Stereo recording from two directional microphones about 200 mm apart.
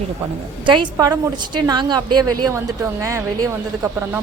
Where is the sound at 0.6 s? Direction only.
25° right (ahead or behind).